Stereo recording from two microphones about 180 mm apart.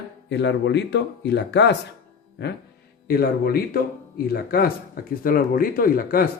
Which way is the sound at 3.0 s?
60° left (ahead or behind).